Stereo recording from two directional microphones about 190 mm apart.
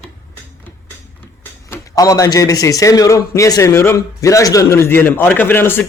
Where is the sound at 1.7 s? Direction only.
15° left (ahead or behind).